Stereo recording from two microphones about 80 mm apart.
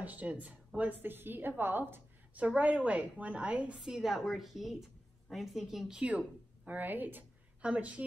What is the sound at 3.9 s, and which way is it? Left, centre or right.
A woman's voice, centre.